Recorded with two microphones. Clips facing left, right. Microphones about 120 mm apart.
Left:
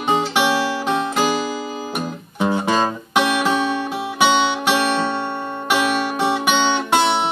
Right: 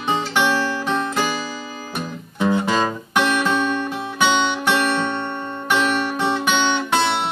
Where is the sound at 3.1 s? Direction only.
10° left (ahead or behind).